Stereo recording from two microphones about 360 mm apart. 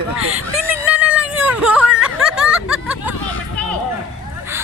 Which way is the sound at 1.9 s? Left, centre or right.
Centre.